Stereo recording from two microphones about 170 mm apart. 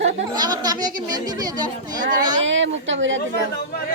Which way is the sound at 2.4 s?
90° right.